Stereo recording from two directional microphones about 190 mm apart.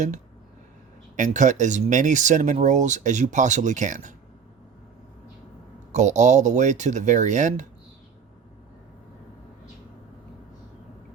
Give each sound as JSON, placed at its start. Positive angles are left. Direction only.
{"t": 1.1, "sound": "speech", "side_deg": -40}
{"t": 5.9, "sound": "speech", "side_deg": -40}